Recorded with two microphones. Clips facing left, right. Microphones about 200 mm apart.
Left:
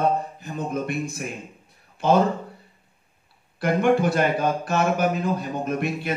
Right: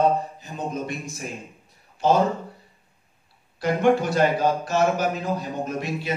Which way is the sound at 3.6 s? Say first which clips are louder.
Even; 55° left (ahead or behind).